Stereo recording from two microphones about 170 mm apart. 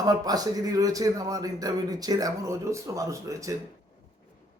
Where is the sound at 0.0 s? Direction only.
20° right (ahead or behind).